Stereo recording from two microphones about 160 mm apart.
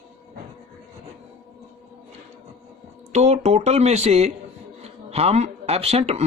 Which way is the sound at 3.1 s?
45° right (ahead or behind).